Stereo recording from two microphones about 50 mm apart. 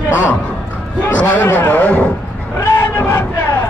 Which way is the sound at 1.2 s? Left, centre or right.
Left.